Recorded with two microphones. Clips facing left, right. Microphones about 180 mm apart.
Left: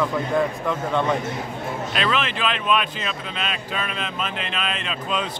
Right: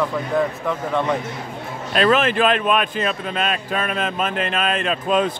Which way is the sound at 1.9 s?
45° right (ahead or behind).